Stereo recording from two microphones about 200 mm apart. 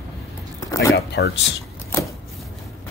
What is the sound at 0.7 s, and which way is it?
Speech, 55° left (ahead or behind).